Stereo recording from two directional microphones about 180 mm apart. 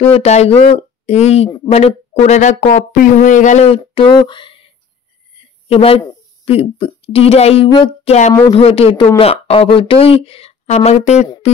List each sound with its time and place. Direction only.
0.0 s speech: 35° left (ahead or behind)
5.7 s speech: 35° left (ahead or behind)
11.4 s a sound: 35° left (ahead or behind)